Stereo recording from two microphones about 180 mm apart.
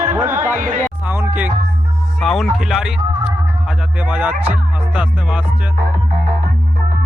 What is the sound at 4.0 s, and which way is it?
Music, 5° right (ahead or behind).